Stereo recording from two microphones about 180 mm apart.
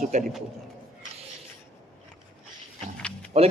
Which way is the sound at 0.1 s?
40° right (ahead or behind).